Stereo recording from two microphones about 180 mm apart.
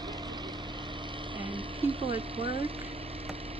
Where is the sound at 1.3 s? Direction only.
30° right (ahead or behind).